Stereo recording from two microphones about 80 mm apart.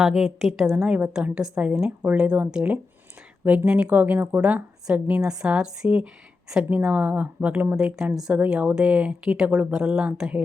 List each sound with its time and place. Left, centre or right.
0.0 s a woman's voice: centre